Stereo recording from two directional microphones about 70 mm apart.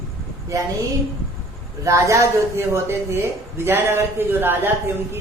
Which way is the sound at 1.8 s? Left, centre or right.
Right.